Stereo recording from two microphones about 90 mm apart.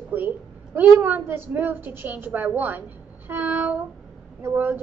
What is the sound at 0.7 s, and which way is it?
A woman's voice, 20° right (ahead or behind).